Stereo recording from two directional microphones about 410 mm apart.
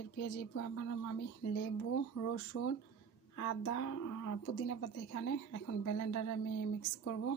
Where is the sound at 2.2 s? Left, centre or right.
Left.